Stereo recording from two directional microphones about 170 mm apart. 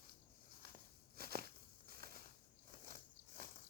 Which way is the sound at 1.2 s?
65° right (ahead or behind).